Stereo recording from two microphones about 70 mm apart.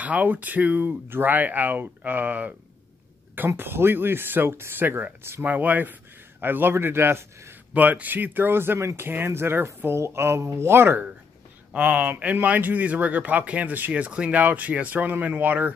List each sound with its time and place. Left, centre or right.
0.0 s speech: right
3.3 s speech: right
5.4 s speech: right
7.7 s speech: right